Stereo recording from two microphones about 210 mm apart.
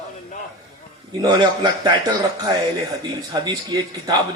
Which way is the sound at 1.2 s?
20° right (ahead or behind).